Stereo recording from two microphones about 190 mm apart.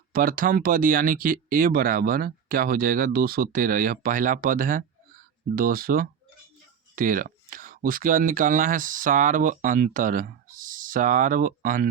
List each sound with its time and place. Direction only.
0.1 s speech: 50° right (ahead or behind)